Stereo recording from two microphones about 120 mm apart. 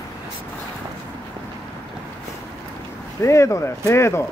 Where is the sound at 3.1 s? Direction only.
25° left (ahead or behind).